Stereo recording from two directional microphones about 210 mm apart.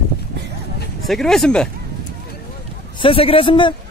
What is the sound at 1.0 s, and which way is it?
Speech, centre (ahead or behind).